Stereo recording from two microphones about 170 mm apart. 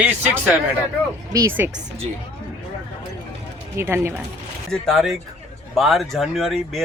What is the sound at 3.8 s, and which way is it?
Speech, 15° right (ahead or behind).